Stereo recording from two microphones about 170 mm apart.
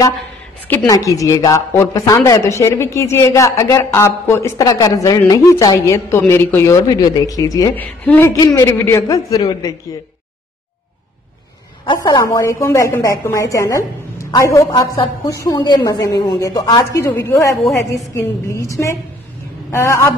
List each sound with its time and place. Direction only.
0.7 s speech: 15° left (ahead or behind)
7.7 s a man's voice: 10° left (ahead or behind)
11.8 s a man's voice: 25° left (ahead or behind)